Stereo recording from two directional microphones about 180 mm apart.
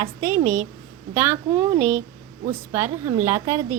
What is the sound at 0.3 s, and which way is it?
A woman's voice, 15° right (ahead or behind).